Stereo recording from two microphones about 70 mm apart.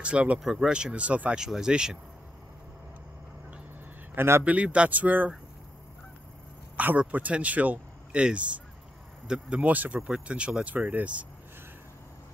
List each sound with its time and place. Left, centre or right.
0.0 s speech: centre
1.4 s speech: centre
4.1 s a man's voice: right
4.5 s speech: centre
7.0 s speech: right
9.7 s speech: right
9.9 s speech: centre